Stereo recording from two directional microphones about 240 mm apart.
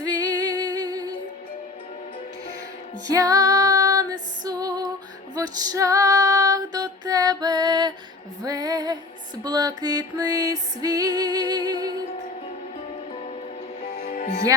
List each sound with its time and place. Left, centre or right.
0.0 s music: centre
3.1 s female singing: centre
5.3 s music: centre
13.9 s music: left